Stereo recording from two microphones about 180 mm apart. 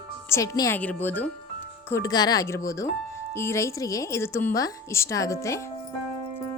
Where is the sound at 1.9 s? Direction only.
20° left (ahead or behind).